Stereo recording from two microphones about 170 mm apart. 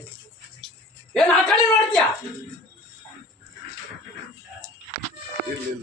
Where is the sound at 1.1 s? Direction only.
5° left (ahead or behind).